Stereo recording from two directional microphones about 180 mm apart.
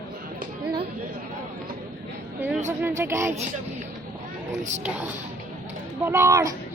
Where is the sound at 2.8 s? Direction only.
15° right (ahead or behind).